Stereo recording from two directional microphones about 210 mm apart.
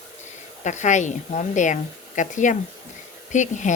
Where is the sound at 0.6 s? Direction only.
35° left (ahead or behind).